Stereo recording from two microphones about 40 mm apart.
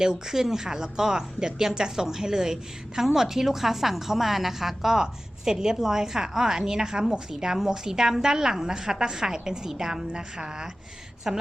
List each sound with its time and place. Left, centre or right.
0.0 s a woman's voice: centre